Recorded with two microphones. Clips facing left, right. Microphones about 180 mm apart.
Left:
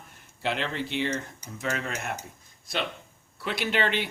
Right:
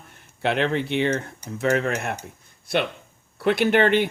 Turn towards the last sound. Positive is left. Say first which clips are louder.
# right 9 dB
turn(degrees=-55)  # may be behind; listen again after turning